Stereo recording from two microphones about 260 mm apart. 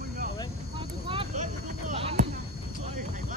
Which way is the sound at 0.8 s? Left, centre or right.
Centre.